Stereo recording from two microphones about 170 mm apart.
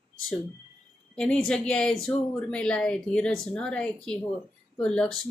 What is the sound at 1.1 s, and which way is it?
Speech, 5° left (ahead or behind).